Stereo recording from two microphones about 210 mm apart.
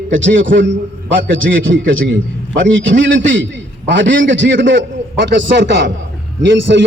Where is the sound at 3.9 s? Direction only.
60° right (ahead or behind).